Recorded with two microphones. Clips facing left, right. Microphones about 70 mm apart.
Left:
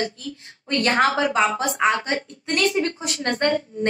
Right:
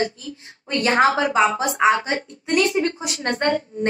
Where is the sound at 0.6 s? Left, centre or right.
Centre.